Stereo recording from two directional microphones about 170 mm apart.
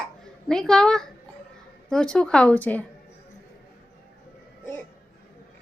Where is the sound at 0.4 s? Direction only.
5° left (ahead or behind).